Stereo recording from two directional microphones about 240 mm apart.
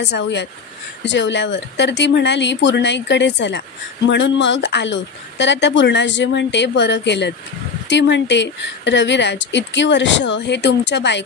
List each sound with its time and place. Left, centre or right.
0.0 s speech: left